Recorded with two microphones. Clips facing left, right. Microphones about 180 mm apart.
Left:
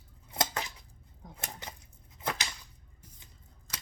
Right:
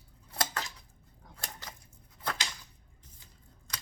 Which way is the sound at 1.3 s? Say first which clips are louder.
Left 2 dB; 20° left (ahead or behind).